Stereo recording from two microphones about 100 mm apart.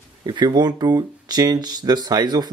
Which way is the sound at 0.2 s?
45° right (ahead or behind).